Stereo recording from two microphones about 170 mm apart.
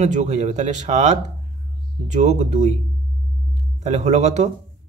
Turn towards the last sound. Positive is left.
turn(degrees=-40)  # may be behind; listen again after turning